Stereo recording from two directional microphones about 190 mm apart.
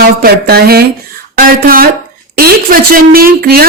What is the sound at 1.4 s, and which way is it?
Speech, 50° right (ahead or behind).